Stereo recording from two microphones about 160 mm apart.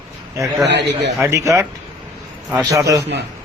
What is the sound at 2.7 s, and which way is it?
Speech, 20° right (ahead or behind).